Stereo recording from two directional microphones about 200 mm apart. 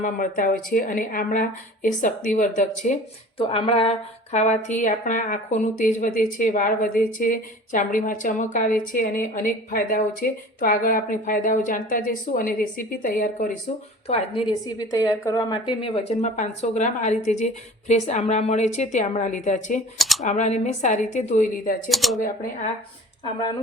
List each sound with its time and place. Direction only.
0.0 s a woman's voice: 45° left (ahead or behind)
14.1 s speech: 30° left (ahead or behind)
21.8 s speech: centre (ahead or behind)